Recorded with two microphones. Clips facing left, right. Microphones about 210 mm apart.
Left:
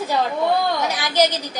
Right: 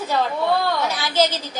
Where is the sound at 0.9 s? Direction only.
15° left (ahead or behind).